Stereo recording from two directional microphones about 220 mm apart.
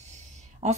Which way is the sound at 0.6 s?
30° right (ahead or behind).